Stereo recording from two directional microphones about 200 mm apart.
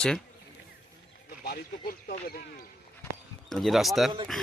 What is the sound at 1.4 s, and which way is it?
Speech, 50° left (ahead or behind).